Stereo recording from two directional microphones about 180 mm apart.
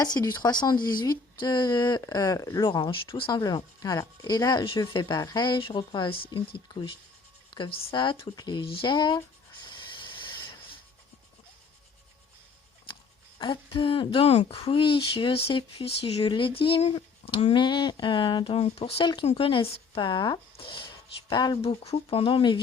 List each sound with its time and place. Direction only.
0.0 s speech: 20° left (ahead or behind)
7.5 s speech: 30° left (ahead or behind)
9.6 s a sound: 25° left (ahead or behind)
13.4 s speech: 30° left (ahead or behind)
21.6 s speech: 35° left (ahead or behind)